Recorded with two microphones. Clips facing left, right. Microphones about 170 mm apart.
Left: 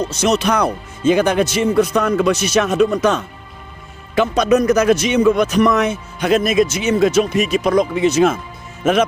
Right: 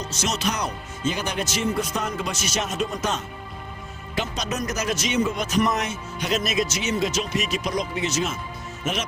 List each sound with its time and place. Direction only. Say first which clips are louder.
0.0 s a man's voice: left 10 dB; 60° left (ahead or behind)